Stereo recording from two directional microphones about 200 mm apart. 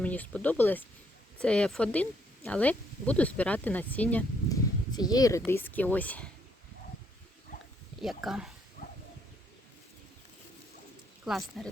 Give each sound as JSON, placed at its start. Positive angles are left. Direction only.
{"t": 0.0, "sound": "speech", "side_deg": 5}
{"t": 4.4, "sound": "a sound", "side_deg": 20}
{"t": 5.5, "sound": "speech", "side_deg": 10}
{"t": 8.0, "sound": "speech", "side_deg": 0}
{"t": 11.3, "sound": "speech", "side_deg": 0}